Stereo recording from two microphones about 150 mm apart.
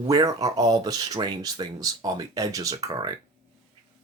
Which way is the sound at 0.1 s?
25° right (ahead or behind).